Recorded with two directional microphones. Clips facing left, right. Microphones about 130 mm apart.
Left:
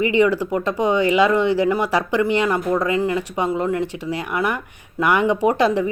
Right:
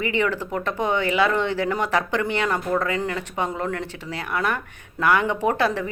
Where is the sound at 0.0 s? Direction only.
15° left (ahead or behind).